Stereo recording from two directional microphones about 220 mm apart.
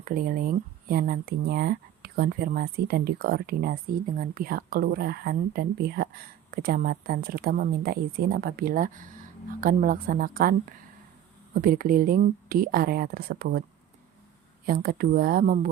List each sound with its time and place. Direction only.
0.0 s speech: 40° right (ahead or behind)
11.6 s speech: 40° right (ahead or behind)
14.7 s speech: 40° right (ahead or behind)